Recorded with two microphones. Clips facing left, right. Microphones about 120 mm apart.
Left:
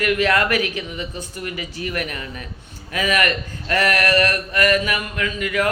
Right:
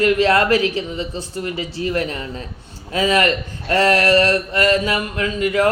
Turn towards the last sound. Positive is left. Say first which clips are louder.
# right 4 dB
turn(degrees=-30)  # may be behind; listen again after turning